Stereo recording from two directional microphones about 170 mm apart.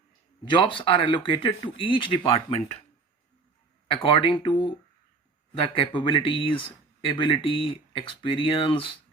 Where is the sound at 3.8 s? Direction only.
30° left (ahead or behind).